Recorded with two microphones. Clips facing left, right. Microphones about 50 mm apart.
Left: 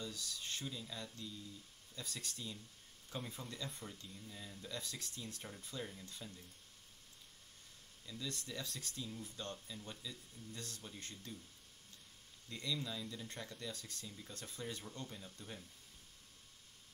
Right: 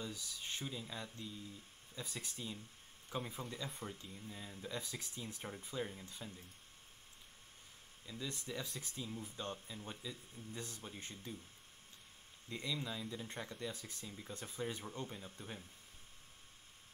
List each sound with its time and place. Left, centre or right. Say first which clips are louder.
0.0 s speech: even; centre
8.0 s speech: right 1 dB; centre
12.4 s speech: right 1 dB; centre